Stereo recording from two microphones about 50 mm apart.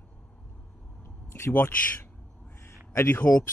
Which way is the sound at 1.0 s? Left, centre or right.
Left.